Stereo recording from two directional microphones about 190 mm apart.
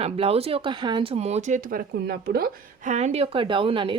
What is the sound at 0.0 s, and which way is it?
Speech, 30° right (ahead or behind).